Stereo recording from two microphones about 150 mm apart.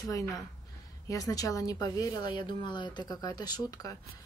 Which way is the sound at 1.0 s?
20° left (ahead or behind).